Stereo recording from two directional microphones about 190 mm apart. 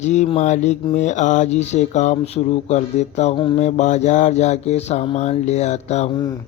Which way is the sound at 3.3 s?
25° left (ahead or behind).